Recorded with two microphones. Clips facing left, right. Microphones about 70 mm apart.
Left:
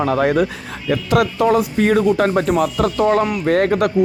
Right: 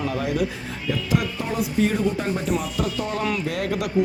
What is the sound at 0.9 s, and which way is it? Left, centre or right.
Speech, left.